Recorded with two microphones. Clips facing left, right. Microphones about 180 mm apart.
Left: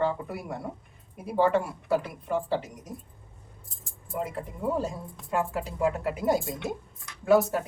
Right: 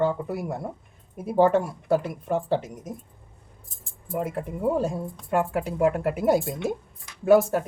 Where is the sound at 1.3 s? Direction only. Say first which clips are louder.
Right 4 dB; 45° right (ahead or behind).